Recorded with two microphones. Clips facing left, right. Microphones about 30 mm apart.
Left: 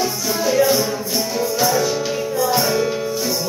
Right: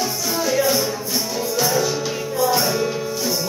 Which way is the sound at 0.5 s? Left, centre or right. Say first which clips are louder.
Left 4 dB; centre.